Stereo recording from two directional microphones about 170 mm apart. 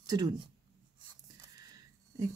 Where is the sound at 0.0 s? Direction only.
25° right (ahead or behind).